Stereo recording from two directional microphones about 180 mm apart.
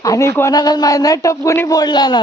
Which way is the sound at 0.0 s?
15° left (ahead or behind).